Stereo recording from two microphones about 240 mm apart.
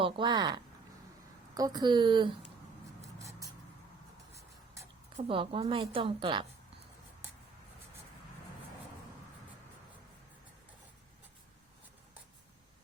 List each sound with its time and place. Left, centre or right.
0.0 s a woman's voice: centre
4.4 s music: centre
5.1 s a woman's voice: right